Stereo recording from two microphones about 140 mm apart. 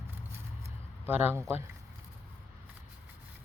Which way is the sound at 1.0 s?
15° right (ahead or behind).